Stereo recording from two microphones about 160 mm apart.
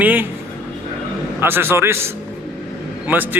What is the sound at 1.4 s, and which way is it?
A man's voice, 15° right (ahead or behind).